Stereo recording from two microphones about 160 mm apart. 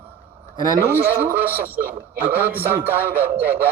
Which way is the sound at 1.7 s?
10° right (ahead or behind).